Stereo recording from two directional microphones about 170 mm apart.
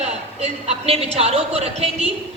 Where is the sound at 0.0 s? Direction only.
35° right (ahead or behind).